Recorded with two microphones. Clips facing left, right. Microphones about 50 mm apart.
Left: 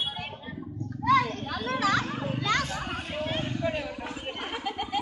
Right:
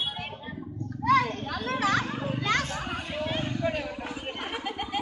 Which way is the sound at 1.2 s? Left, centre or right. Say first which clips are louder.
Right 1 dB; centre.